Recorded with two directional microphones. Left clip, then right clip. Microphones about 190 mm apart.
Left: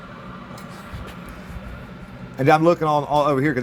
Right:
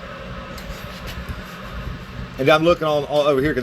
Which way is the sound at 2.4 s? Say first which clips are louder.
Right 1 dB; 40° left (ahead or behind).